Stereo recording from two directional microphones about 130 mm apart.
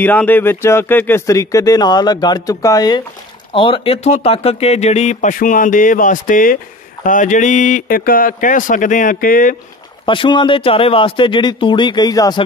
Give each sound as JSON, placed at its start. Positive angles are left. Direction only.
{"t": 0.0, "sound": "speech", "side_deg": 15}
{"t": 3.5, "sound": "speech", "side_deg": 40}
{"t": 10.0, "sound": "speech", "side_deg": 40}